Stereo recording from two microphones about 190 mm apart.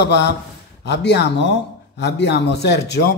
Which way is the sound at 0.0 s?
60° left (ahead or behind).